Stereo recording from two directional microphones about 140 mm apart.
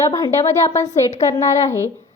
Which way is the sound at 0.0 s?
20° left (ahead or behind).